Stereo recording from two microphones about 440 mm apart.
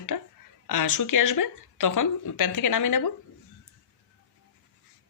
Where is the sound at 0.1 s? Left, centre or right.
Left.